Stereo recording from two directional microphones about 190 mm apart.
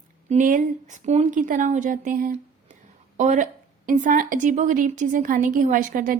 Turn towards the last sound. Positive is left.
turn(degrees=-45)  # may be behind; listen again after turning